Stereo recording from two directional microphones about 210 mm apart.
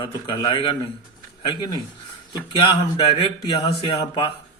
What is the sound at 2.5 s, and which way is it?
Speech, 20° left (ahead or behind).